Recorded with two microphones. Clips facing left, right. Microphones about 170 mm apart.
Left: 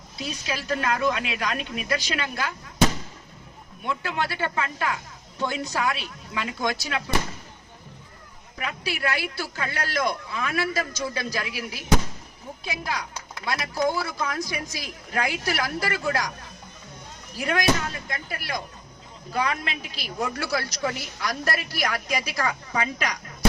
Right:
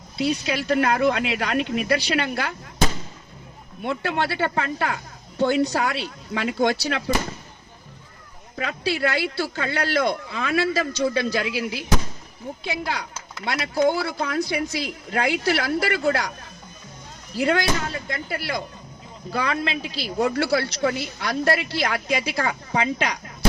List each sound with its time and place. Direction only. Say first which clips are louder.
0.4 s speech: right 2 dB; 30° right (ahead or behind)
3.8 s a woman's voice: right 4 dB; 30° right (ahead or behind)
8.5 s a woman's voice: right 6 dB; 30° right (ahead or behind)
17.3 s a woman's voice: right 2 dB; 30° right (ahead or behind)